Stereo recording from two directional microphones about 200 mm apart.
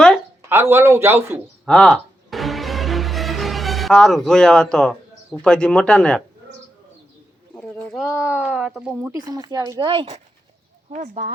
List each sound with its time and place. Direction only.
0.4 s a man's voice: 10° right (ahead or behind)
1.6 s music: 5° left (ahead or behind)
5.4 s speech: 5° left (ahead or behind)
7.5 s speech: 5° left (ahead or behind)
9.2 s speech: 20° right (ahead or behind)
10.9 s speech: 40° right (ahead or behind)